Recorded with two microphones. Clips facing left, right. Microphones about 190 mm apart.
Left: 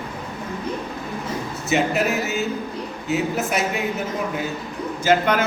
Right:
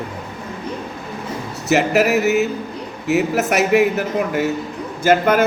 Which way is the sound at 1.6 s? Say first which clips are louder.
Right 5 dB; 70° right (ahead or behind).